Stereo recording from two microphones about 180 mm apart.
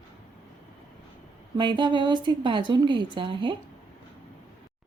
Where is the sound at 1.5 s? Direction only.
25° right (ahead or behind).